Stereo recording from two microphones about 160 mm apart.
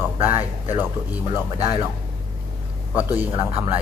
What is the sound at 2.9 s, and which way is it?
Speech, 10° right (ahead or behind).